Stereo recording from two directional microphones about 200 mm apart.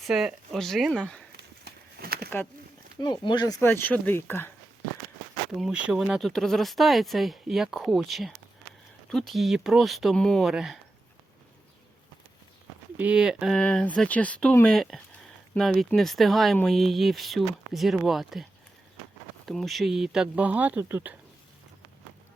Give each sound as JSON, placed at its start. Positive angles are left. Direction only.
{"t": 0.0, "sound": "speech", "side_deg": 0}
{"t": 1.4, "sound": "a sound", "side_deg": -50}
{"t": 3.0, "sound": "speech", "side_deg": 20}
{"t": 5.5, "sound": "speech", "side_deg": -5}
{"t": 13.0, "sound": "speech", "side_deg": -5}
{"t": 19.5, "sound": "speech", "side_deg": 0}